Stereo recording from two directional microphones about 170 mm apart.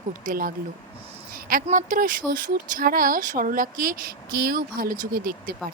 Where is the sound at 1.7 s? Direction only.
50° right (ahead or behind).